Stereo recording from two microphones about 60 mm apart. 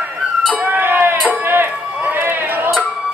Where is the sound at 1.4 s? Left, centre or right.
Right.